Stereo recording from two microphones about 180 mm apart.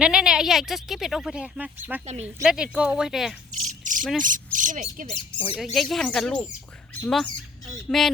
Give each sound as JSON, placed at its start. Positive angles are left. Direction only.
{"t": 0.0, "sound": "speech", "side_deg": -5}
{"t": 3.7, "sound": "a sound", "side_deg": -45}
{"t": 4.2, "sound": "speech", "side_deg": -45}
{"t": 5.5, "sound": "speech", "side_deg": 0}